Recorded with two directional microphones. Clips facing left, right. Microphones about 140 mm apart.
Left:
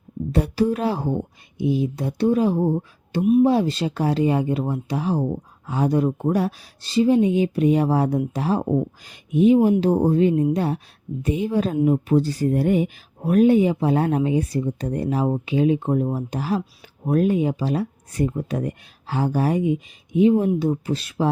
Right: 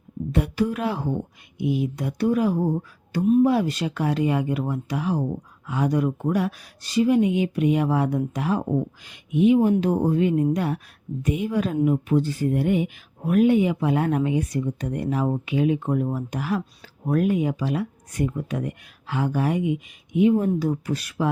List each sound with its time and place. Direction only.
0.3 s speech: 35° left (ahead or behind)